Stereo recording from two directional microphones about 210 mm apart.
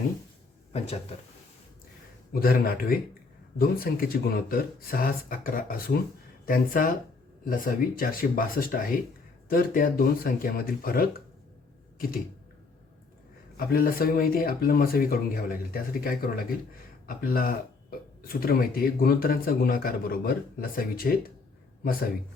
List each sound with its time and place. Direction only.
0.7 s speech: 30° left (ahead or behind)
2.3 s a man's voice: 45° left (ahead or behind)
11.9 s a sound: 45° left (ahead or behind)
13.6 s a man's voice: 45° left (ahead or behind)